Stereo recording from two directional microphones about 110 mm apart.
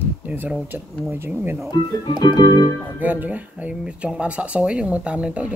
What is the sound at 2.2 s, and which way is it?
Music, 40° left (ahead or behind).